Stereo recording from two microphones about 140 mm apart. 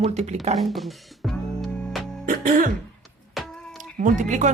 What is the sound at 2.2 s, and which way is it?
Music, 90° right.